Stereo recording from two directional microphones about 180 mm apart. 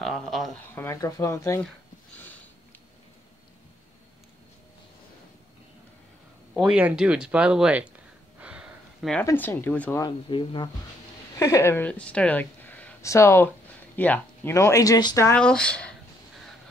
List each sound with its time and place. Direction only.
0.0 s a sound: centre (ahead or behind)
0.7 s speech: 15° left (ahead or behind)
6.5 s speech: 5° right (ahead or behind)
8.4 s a sound: 5° right (ahead or behind)
9.1 s speech: 10° left (ahead or behind)
10.0 s speech: 25° left (ahead or behind)
11.3 s a woman's voice: 15° left (ahead or behind)
15.4 s speech: 5° left (ahead or behind)